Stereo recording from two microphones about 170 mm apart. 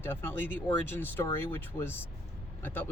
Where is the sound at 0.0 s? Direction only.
15° left (ahead or behind).